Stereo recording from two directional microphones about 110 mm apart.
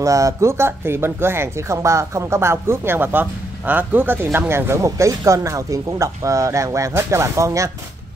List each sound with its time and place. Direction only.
0.0 s speech: 30° right (ahead or behind)